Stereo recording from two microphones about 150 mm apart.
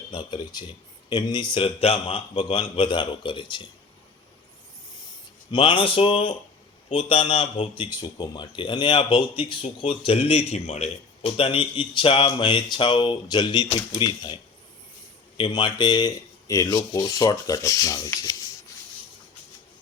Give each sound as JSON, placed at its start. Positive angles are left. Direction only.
{"t": 0.1, "sound": "speech", "side_deg": 30}
{"t": 5.5, "sound": "speech", "side_deg": 35}
{"t": 15.4, "sound": "speech", "side_deg": 35}